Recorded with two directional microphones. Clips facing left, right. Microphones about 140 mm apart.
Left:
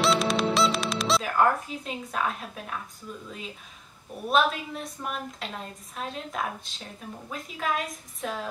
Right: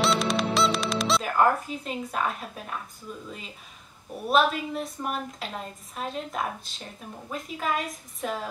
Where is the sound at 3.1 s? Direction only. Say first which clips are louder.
Even; 5° right (ahead or behind).